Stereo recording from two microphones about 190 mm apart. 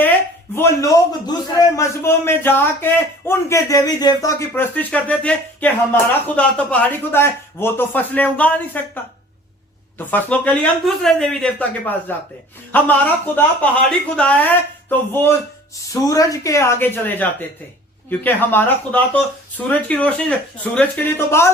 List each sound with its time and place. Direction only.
0.5 s a man's voice: 15° left (ahead or behind)
10.1 s a man's voice: 10° left (ahead or behind)